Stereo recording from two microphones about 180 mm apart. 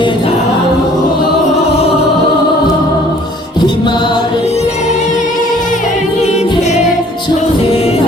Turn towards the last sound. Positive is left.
turn(degrees=40)  # may be behind; listen again after turning